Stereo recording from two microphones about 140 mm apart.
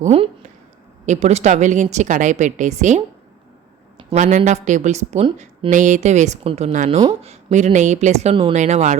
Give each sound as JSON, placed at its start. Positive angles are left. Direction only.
{"t": 0.0, "sound": "a woman's voice", "side_deg": -45}
{"t": 4.1, "sound": "a woman's voice", "side_deg": -55}
{"t": 8.5, "sound": "a woman's voice", "side_deg": -55}